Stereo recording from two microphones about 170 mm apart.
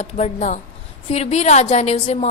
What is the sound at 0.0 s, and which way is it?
A woman's voice, 45° left (ahead or behind).